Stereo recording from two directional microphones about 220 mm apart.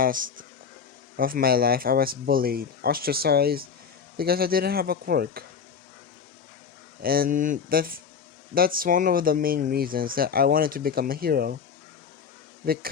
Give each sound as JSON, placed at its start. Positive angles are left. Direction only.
{"t": 0.0, "sound": "speech", "side_deg": -40}
{"t": 7.0, "sound": "speech", "side_deg": -40}
{"t": 12.6, "sound": "speech", "side_deg": -45}